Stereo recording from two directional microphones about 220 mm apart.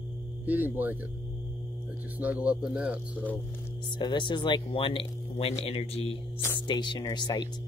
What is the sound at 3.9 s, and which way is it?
Speech, 20° left (ahead or behind).